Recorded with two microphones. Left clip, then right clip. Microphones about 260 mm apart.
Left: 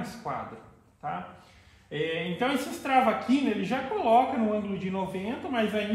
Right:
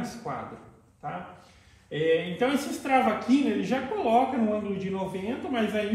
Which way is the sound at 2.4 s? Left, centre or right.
Centre.